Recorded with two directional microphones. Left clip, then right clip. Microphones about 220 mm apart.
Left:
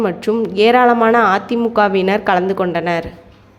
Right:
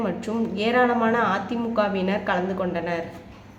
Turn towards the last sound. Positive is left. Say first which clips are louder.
# left 9 dB
turn(degrees=45)  # may be behind; listen again after turning